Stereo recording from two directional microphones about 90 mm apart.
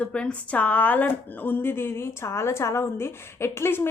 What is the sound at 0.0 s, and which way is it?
Speech, 10° left (ahead or behind).